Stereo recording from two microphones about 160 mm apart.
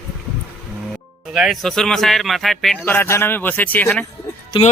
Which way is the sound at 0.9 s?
5° right (ahead or behind).